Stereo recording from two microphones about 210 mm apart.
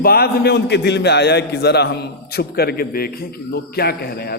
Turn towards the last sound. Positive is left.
turn(degrees=50)  # may be behind; listen again after turning